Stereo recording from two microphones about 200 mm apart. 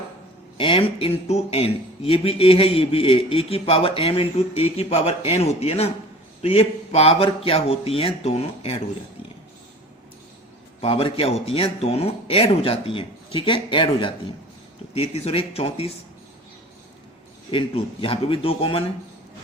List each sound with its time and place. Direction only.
0.5 s speech: 25° left (ahead or behind)
10.8 s speech: 30° left (ahead or behind)
17.5 s speech: 25° left (ahead or behind)